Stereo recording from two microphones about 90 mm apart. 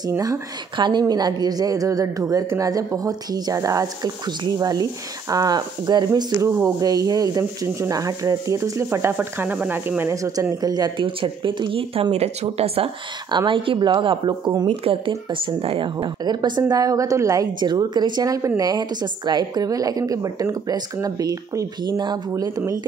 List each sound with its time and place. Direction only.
0.7 s a woman's voice: 55° right (ahead or behind); by 9.1 s 35° right (ahead or behind)
9.2 s speech: 20° right (ahead or behind)
10.6 s a woman's voice: 50° right (ahead or behind)
11.0 s speech: 75° right (ahead or behind); by 13.4 s 90° right
13.5 s a woman's voice: 70° right (ahead or behind); by 14.8 s 55° right (ahead or behind)
14.9 s a woman's voice: 85° right; by 17.5 s 35° right (ahead or behind)
17.6 s a woman's voice: 55° right (ahead or behind)